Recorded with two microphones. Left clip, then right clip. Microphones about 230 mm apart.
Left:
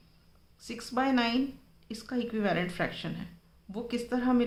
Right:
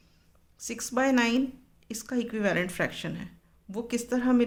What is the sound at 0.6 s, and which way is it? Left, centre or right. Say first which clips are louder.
Speech: right 3 dB; right.